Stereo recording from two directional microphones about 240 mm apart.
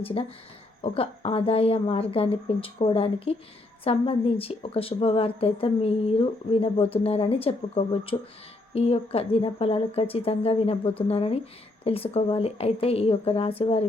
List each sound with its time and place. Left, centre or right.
0.0 s a woman's voice: left